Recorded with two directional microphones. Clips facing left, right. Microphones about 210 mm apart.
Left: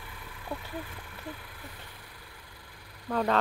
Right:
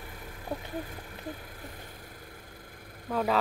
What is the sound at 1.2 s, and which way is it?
Vehicle, 40° right (ahead or behind).